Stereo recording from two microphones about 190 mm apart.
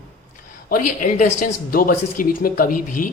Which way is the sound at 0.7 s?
45° left (ahead or behind).